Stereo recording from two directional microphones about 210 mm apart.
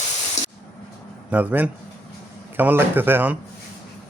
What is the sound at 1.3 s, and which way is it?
Speech, 5° right (ahead or behind).